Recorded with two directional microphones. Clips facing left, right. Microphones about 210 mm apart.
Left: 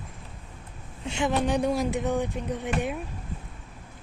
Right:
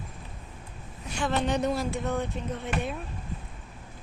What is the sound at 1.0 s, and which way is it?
Speech, 20° left (ahead or behind).